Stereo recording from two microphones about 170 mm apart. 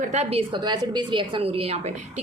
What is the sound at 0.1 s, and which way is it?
A woman's voice, 40° right (ahead or behind).